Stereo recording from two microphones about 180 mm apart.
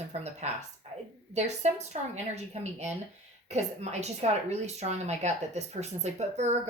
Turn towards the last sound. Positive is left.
turn(degrees=-40)  # may be behind; listen again after turning